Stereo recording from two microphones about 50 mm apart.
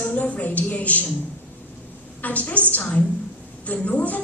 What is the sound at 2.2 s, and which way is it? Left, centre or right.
A woman's voice, left.